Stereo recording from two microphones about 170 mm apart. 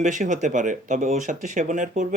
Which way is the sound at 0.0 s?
50° right (ahead or behind).